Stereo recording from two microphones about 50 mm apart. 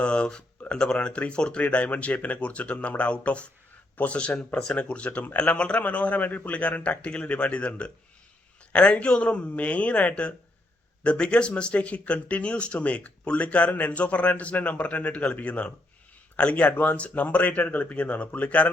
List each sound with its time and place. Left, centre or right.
0.0 s a sound: centre
0.7 s speech: centre
1.6 s speech: left